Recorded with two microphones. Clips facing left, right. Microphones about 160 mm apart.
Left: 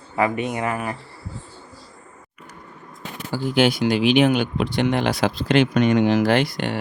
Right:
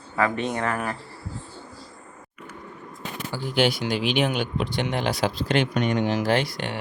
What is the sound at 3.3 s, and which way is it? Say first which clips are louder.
Speech: left 4 dB; 50° left (ahead or behind).